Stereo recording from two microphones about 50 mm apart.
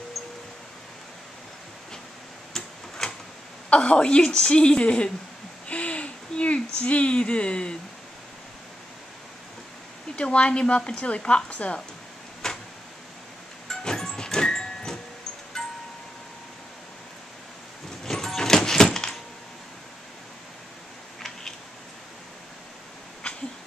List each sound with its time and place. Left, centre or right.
2.5 s tick-tock: centre
3.7 s a woman's voice: left
5.7 s a sound: left
10.1 s a woman's voice: left
12.4 s a sound: centre
13.7 s music: centre
18.0 s music: centre